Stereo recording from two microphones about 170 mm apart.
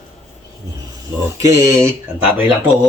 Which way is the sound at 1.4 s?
20° right (ahead or behind).